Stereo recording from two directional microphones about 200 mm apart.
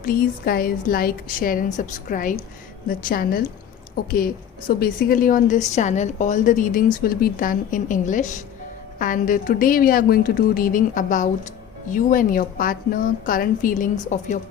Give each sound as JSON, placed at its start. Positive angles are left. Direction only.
{"t": 0.0, "sound": "a woman's voice", "side_deg": 45}